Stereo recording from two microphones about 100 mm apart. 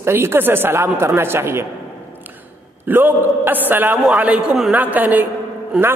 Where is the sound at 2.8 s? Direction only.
20° right (ahead or behind).